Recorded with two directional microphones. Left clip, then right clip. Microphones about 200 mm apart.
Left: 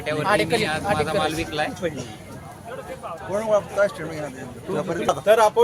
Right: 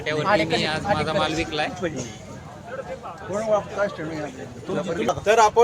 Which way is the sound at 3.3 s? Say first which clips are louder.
Left 2 dB; 60° left (ahead or behind).